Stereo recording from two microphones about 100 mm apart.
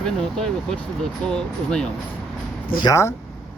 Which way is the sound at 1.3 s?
5° left (ahead or behind).